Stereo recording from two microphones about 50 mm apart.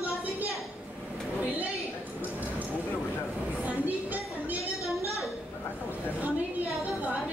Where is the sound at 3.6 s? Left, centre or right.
Right.